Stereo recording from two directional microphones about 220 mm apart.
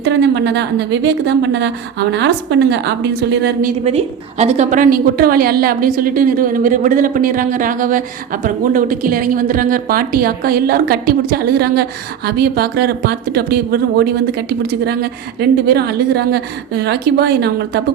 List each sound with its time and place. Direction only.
0.0 s a woman's voice: 50° right (ahead or behind)
3.8 s a woman's voice: 30° right (ahead or behind); by 17.5 s 50° right (ahead or behind)